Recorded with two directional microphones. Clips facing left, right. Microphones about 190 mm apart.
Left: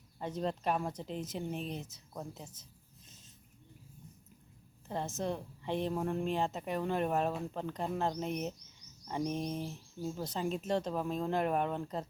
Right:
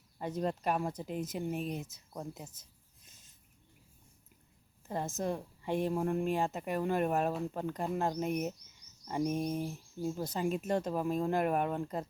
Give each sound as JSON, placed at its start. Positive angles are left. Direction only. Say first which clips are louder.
{"t": 0.2, "sound": "speech", "louder": "right 1 dB", "side_deg": -5}
{"t": 4.9, "sound": "speech", "louder": "right 1 dB", "side_deg": -10}